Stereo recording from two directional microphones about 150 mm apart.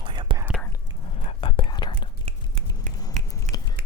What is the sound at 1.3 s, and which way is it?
Whispering, 35° left (ahead or behind).